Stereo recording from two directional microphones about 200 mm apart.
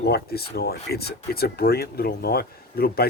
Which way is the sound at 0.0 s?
50° left (ahead or behind).